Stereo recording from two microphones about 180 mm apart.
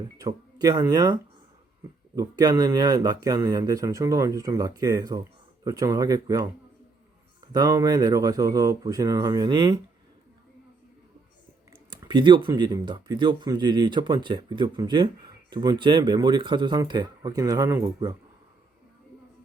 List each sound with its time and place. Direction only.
0.2 s speech: 20° right (ahead or behind)
11.9 s speech: 25° right (ahead or behind)